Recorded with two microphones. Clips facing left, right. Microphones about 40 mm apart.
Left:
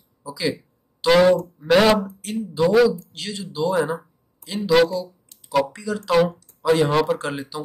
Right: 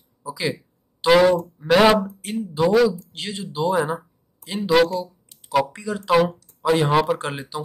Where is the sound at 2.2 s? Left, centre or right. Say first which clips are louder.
Even; right.